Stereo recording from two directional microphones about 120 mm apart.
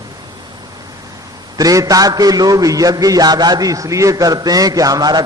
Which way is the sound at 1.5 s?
30° right (ahead or behind).